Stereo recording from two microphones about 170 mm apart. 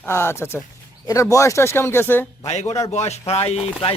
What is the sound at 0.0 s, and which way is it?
Speech, 15° left (ahead or behind).